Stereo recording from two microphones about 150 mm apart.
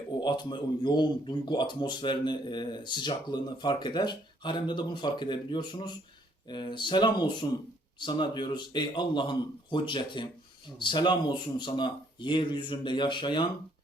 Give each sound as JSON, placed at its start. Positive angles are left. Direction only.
{"t": 0.2, "sound": "a man's voice", "side_deg": 30}